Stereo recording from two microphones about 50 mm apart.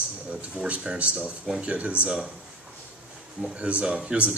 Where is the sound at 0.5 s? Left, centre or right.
Right.